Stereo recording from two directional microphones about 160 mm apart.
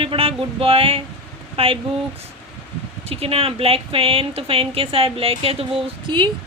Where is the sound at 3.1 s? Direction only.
35° right (ahead or behind).